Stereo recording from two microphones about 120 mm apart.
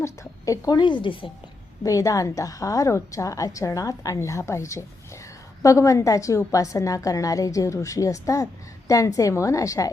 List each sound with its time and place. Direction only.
0.0 s a woman's voice: 30° left (ahead or behind); by 1.3 s 45° left (ahead or behind)
1.8 s a woman's voice: 30° left (ahead or behind)